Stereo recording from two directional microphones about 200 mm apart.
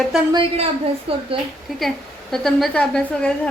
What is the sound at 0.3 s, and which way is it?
Speech, 30° right (ahead or behind).